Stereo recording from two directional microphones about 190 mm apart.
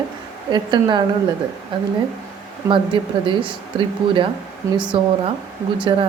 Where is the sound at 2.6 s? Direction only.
25° right (ahead or behind).